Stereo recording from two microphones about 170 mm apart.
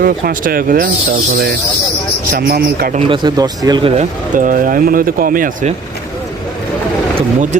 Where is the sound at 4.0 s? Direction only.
50° right (ahead or behind).